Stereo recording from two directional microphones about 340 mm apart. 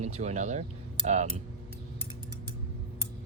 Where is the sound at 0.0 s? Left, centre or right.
Centre.